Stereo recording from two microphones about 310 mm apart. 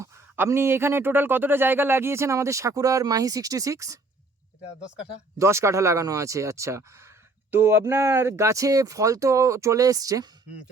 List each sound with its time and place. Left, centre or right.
0.0 s speech: centre
5.4 s speech: centre